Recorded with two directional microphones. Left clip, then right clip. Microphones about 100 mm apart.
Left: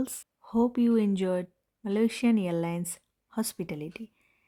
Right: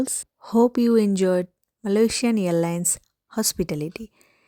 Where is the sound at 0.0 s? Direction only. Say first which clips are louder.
Right 8 dB; 65° right (ahead or behind).